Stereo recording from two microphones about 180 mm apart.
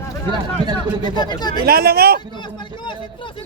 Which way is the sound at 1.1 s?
25° left (ahead or behind).